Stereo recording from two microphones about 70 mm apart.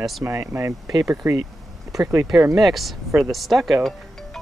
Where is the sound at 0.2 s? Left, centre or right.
Right.